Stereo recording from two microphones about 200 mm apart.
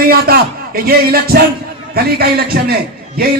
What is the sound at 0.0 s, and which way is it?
A man's voice, 50° right (ahead or behind).